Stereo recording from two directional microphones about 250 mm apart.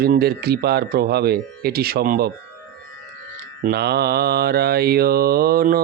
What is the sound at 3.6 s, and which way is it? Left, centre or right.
A man's voice, right.